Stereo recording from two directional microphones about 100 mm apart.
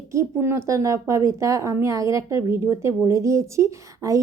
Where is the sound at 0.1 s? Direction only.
25° right (ahead or behind).